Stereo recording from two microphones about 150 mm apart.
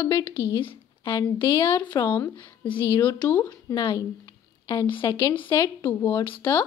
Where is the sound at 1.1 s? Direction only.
20° left (ahead or behind).